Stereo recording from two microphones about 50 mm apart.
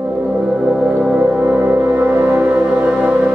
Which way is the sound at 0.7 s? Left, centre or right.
Right.